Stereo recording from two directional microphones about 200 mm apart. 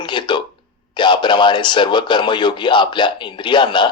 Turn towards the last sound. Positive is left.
turn(degrees=25)  # may be behind; listen again after turning